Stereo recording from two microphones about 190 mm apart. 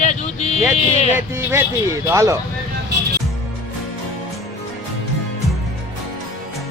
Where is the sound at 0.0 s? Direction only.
35° left (ahead or behind).